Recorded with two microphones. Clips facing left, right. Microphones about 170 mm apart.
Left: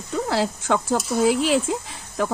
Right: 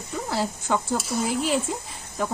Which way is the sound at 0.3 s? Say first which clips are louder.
Left 3 dB; 90° left.